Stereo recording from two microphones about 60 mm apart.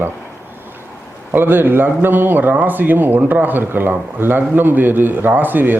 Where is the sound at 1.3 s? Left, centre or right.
Right.